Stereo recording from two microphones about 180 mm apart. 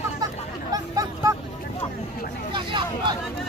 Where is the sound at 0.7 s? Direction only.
20° right (ahead or behind).